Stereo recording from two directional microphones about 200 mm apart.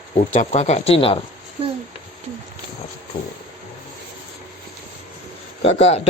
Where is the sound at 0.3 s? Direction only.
30° left (ahead or behind).